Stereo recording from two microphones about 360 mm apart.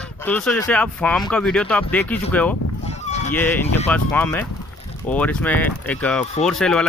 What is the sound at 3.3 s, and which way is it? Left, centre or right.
Speech, centre.